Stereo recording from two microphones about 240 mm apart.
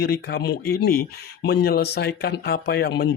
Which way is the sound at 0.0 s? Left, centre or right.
Left.